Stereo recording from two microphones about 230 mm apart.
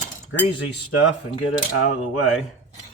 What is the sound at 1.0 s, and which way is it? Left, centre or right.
Cutlery, left.